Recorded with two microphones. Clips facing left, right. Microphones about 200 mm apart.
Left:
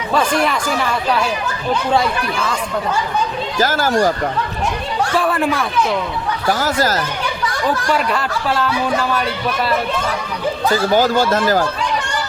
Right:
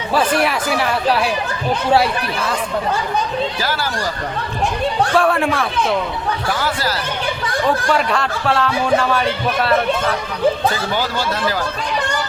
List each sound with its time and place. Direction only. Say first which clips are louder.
0.1 s speech: even; 5° right (ahead or behind)
3.6 s speech: left 7 dB; 45° left (ahead or behind)
5.1 s speech: even; centre (ahead or behind)
6.5 s speech: left 6 dB; 40° left (ahead or behind)
7.9 s speech: right 1 dB; centre (ahead or behind)
10.9 s speech: left 7 dB; 45° left (ahead or behind)